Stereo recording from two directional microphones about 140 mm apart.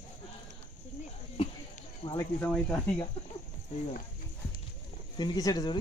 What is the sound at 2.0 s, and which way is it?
Cricket, 45° left (ahead or behind).